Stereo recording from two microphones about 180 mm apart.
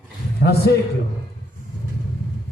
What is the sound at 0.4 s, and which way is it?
Speech, 65° left (ahead or behind).